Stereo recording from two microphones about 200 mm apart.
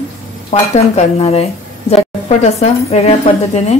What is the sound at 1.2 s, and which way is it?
Speech, 30° left (ahead or behind).